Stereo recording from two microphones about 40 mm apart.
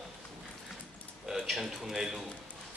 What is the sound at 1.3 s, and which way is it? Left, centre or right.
Speech, centre.